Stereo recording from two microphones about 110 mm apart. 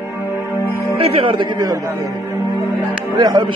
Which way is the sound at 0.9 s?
55° right (ahead or behind).